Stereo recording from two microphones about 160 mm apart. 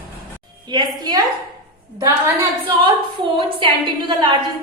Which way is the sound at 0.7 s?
25° right (ahead or behind).